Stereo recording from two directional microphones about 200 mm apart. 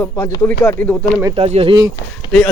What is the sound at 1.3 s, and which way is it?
Speech, 30° right (ahead or behind).